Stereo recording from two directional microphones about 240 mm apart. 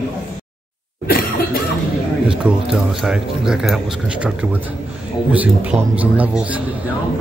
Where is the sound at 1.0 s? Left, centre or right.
Left.